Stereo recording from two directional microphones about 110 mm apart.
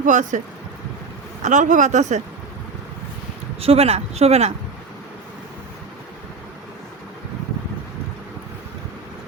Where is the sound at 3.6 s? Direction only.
65° right (ahead or behind).